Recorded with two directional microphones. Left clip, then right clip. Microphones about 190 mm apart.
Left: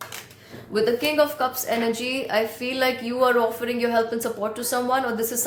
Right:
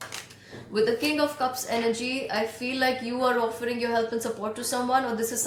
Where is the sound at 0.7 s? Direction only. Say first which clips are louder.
Left 3 dB; 45° left (ahead or behind).